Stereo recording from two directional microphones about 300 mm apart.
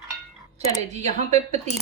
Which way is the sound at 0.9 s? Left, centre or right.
Right.